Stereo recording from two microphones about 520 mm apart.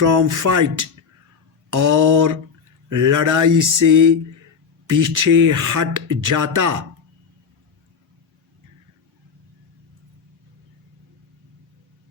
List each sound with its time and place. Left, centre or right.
0.0 s speech: right